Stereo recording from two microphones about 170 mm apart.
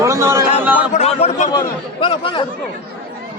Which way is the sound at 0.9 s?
40° left (ahead or behind).